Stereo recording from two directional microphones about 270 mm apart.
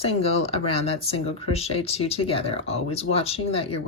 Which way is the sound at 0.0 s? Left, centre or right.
Left.